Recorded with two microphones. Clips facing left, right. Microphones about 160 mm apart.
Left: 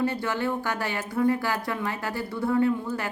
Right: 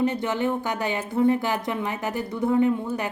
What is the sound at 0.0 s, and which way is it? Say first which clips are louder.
Speech: right 3 dB; 20° right (ahead or behind).